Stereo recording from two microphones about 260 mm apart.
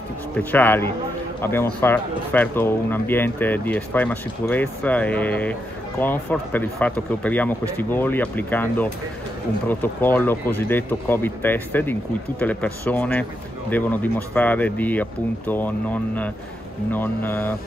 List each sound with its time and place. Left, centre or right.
0.4 s speech: centre